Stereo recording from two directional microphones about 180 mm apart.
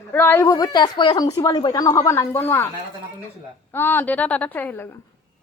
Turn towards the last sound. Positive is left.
turn(degrees=10)  # may be behind; listen again after turning